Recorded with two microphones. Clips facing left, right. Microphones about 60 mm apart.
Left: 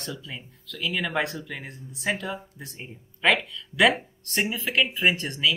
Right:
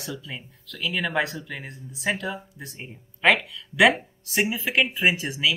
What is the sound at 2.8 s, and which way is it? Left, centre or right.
Speech, centre.